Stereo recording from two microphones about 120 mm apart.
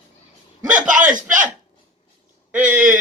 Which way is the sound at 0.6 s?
90° right.